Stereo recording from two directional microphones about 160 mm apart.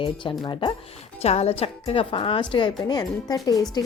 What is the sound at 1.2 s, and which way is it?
A woman's voice, 40° left (ahead or behind).